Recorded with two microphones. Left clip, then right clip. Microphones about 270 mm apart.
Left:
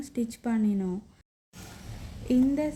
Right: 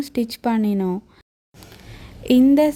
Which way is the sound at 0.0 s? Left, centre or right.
Right.